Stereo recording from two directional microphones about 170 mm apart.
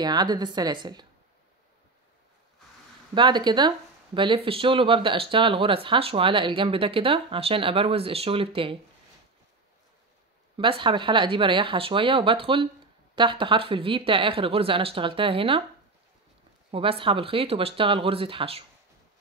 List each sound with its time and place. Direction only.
0.0 s a woman's voice: 25° right (ahead or behind)
3.2 s speech: 25° right (ahead or behind)
10.6 s speech: 30° right (ahead or behind)
16.7 s speech: 30° right (ahead or behind)